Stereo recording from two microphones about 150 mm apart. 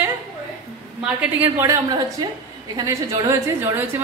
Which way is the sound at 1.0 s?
10° right (ahead or behind).